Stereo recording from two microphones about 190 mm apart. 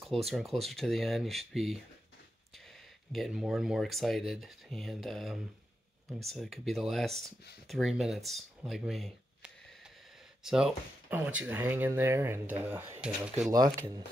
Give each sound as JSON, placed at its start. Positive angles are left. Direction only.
{"t": 0.0, "sound": "speech", "side_deg": 0}
{"t": 3.1, "sound": "speech", "side_deg": 0}
{"t": 13.5, "sound": "speech", "side_deg": -20}